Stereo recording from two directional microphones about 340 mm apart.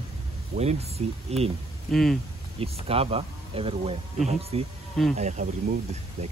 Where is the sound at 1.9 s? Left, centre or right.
Centre.